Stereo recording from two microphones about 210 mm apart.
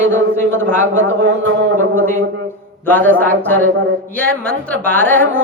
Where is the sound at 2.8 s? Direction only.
10° left (ahead or behind).